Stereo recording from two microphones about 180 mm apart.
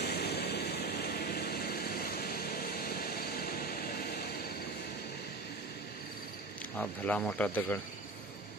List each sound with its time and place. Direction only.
0.0 s vehicle: 65° left (ahead or behind)
6.8 s speech: 10° left (ahead or behind)